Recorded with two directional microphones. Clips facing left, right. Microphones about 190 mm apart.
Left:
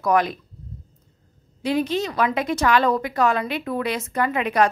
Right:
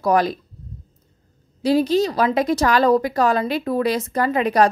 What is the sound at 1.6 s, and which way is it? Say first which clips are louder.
A woman's voice: right 5 dB; 35° right (ahead or behind).